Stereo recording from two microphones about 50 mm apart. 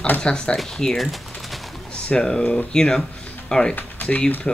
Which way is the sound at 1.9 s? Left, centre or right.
Centre.